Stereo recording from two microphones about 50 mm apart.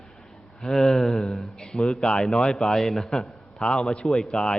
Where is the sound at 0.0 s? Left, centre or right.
Centre.